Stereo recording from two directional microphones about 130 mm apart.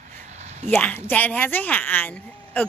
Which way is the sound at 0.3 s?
60° right (ahead or behind).